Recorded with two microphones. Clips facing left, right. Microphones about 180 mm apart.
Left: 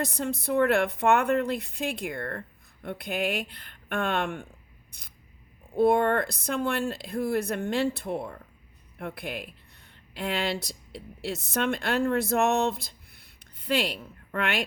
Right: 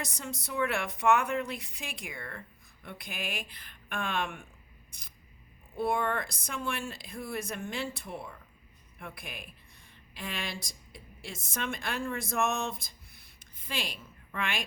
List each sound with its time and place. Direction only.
0.0 s speech: 60° left (ahead or behind)
4.9 s single-lens reflex camera: 60° left (ahead or behind)
5.7 s speech: 60° left (ahead or behind)